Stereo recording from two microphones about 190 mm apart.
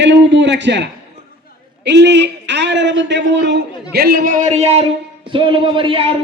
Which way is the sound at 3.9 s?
55° right (ahead or behind).